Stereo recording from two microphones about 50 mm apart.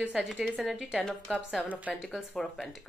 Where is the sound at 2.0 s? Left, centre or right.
Centre.